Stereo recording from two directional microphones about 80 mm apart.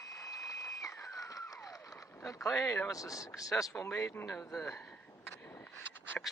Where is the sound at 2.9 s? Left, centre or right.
Left.